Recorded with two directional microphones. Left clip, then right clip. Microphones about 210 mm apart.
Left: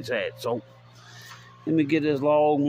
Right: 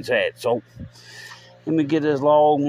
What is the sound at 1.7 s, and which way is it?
Speech, 5° right (ahead or behind).